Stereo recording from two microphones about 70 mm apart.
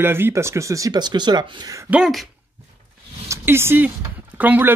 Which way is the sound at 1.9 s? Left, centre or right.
Right.